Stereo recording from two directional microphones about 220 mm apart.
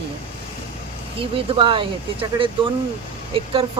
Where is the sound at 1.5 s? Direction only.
20° right (ahead or behind).